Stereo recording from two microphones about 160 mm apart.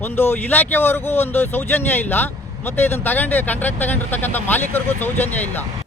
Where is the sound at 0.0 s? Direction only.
15° left (ahead or behind).